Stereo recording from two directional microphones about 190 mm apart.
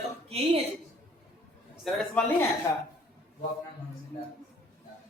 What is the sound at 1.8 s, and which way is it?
Speech, centre (ahead or behind).